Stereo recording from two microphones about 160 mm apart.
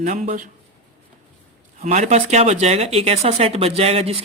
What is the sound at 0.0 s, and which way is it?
Speech, 50° right (ahead or behind).